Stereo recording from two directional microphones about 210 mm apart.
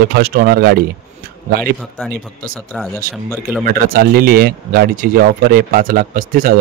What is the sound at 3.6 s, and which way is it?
Speech, 45° right (ahead or behind).